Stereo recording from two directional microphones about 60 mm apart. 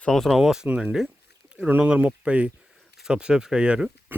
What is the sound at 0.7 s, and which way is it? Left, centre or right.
Speech, right.